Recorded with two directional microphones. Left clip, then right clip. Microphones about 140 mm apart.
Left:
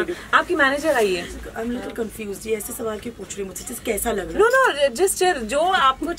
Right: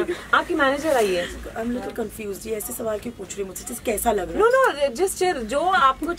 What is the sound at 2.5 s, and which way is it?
Speech, 5° right (ahead or behind).